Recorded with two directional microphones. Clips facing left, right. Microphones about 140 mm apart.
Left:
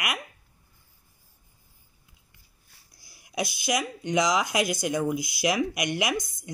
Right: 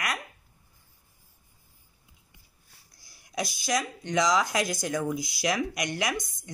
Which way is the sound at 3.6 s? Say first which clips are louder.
Left 1 dB; 10° left (ahead or behind).